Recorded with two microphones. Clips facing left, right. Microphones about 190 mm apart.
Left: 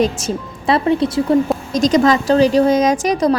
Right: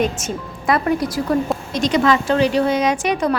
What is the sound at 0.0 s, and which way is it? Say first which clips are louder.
Speech: left 4 dB; 35° left (ahead or behind).